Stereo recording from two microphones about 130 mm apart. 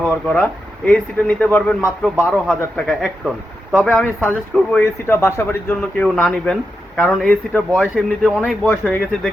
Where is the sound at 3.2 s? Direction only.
5° right (ahead or behind).